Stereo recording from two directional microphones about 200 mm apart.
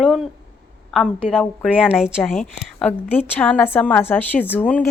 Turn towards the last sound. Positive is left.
turn(degrees=10)  # may be behind; listen again after turning